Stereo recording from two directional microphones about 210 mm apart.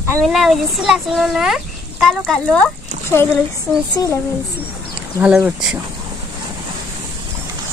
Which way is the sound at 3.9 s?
15° left (ahead or behind).